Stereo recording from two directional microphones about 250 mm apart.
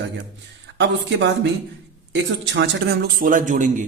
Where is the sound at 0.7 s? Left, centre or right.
Right.